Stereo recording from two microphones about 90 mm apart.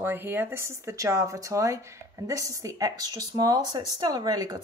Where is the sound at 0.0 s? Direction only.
25° right (ahead or behind).